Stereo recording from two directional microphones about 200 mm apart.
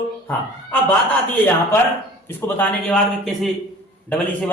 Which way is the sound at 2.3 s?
10° left (ahead or behind).